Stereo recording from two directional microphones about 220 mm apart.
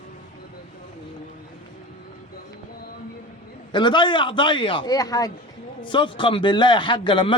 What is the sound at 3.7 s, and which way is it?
A man's voice, 20° left (ahead or behind).